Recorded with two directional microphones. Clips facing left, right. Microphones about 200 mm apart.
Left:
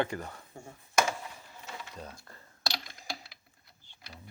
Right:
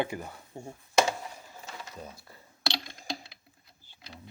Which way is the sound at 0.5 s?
25° right (ahead or behind).